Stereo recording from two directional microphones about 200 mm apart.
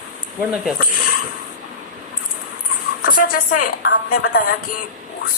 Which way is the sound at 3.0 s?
45° left (ahead or behind).